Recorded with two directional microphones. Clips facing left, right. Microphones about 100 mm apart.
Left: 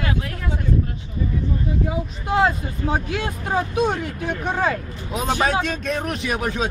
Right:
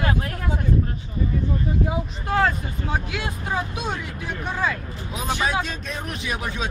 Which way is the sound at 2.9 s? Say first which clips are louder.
Left 3 dB; 40° left (ahead or behind).